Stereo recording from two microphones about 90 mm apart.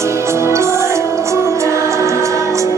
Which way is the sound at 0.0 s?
30° right (ahead or behind).